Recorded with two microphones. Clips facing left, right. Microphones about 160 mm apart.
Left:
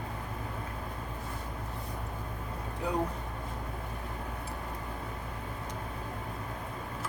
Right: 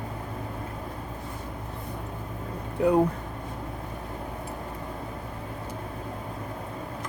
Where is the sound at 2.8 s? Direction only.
65° right (ahead or behind).